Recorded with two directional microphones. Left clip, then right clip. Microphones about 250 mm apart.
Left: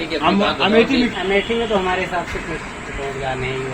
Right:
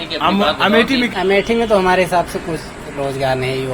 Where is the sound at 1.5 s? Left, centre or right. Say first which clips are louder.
Right 5 dB; right.